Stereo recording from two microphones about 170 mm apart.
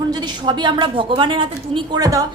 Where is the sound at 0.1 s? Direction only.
25° right (ahead or behind).